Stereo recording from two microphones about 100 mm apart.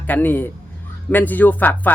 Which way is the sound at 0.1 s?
20° left (ahead or behind).